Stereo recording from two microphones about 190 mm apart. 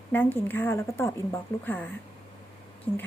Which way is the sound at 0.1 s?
10° left (ahead or behind).